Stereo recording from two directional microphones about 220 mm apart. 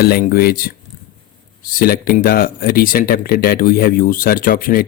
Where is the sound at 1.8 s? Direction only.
45° left (ahead or behind).